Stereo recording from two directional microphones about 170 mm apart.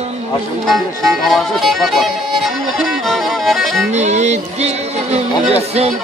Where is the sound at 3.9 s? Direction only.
40° right (ahead or behind).